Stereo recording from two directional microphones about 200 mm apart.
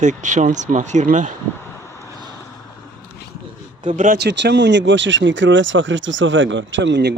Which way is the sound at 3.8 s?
40° right (ahead or behind).